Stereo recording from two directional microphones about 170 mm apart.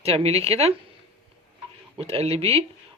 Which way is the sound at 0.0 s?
35° right (ahead or behind).